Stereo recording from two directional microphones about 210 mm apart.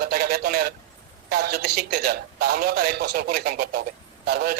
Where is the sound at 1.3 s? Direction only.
50° right (ahead or behind).